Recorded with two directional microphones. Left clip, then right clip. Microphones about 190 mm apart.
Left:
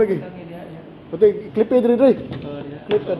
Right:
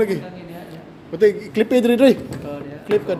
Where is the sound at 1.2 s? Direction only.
30° right (ahead or behind).